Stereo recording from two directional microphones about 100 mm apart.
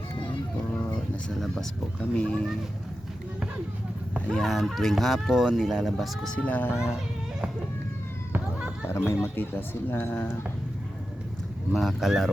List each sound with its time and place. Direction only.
1.3 s speech: centre (ahead or behind)
4.4 s speech: centre (ahead or behind)
6.3 s speech: 15° left (ahead or behind)
8.3 s a sound: 15° right (ahead or behind)
8.9 s speech: 25° left (ahead or behind)
11.7 s speech: centre (ahead or behind)